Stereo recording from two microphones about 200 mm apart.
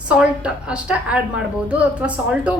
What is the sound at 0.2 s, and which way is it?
A woman's voice, 5° right (ahead or behind).